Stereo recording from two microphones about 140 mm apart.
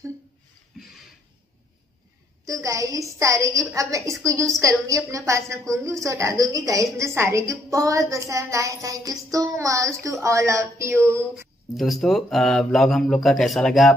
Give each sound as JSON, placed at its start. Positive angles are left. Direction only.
{"t": 2.4, "sound": "a woman's voice", "side_deg": -25}
{"t": 11.7, "sound": "speech", "side_deg": 0}